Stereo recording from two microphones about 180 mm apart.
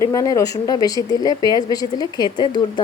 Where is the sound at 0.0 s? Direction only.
20° left (ahead or behind).